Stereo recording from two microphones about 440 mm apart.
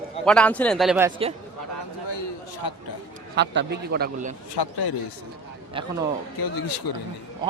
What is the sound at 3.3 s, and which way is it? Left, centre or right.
A man's voice, right.